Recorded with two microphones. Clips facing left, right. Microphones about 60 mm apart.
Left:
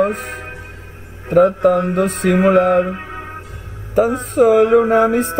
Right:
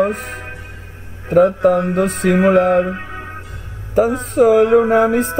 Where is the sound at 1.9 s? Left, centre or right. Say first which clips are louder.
Even; centre.